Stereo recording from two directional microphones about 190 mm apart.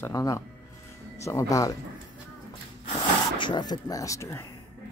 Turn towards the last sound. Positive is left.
turn(degrees=15)  # may be behind; listen again after turning